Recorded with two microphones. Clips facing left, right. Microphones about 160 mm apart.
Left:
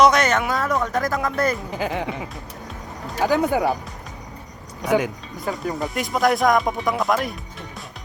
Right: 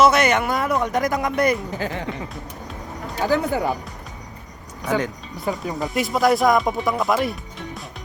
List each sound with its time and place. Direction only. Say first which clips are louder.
0.0 s speech: even; 10° right (ahead or behind)
1.8 s speech: left 2 dB; 15° left (ahead or behind)
3.2 s speech: left 1 dB; 15° left (ahead or behind)
4.9 s speech: left 3 dB; 10° left (ahead or behind)
5.5 s speech: even; centre (ahead or behind)